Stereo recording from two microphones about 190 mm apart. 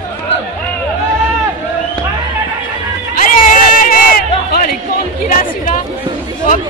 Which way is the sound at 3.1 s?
45° left (ahead or behind).